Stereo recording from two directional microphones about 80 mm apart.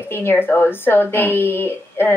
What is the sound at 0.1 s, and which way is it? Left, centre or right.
A woman's voice, left.